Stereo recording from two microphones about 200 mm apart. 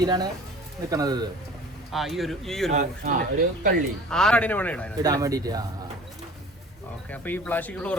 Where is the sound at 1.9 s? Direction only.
Centre (ahead or behind).